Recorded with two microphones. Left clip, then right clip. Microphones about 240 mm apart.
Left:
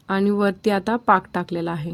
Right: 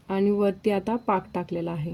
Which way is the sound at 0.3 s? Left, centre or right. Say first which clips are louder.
Left 2 dB; left.